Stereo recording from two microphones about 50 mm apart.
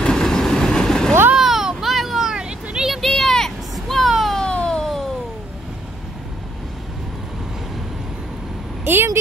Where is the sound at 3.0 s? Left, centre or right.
Centre.